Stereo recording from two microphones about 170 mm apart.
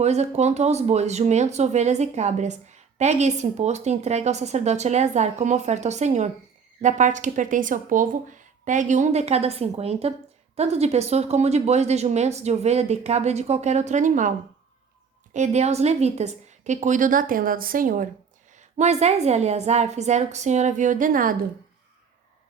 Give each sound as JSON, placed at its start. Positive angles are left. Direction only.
{"t": 0.0, "sound": "a woman's voice", "side_deg": -40}
{"t": 18.8, "sound": "speech", "side_deg": -40}